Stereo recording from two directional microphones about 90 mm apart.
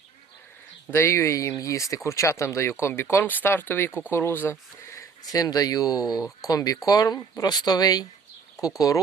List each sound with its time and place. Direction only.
0.9 s speech: 30° left (ahead or behind)